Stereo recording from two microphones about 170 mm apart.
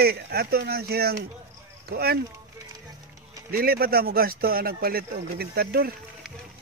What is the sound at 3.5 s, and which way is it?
Speech, 60° right (ahead or behind).